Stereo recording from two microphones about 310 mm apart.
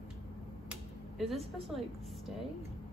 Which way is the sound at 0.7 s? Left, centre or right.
Centre.